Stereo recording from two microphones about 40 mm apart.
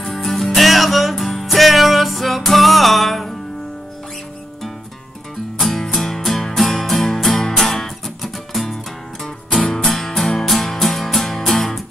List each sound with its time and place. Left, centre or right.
0.0 s music: centre
5.6 s music: centre